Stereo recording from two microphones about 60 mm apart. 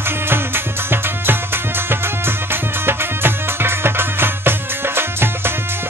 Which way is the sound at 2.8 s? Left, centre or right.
Right.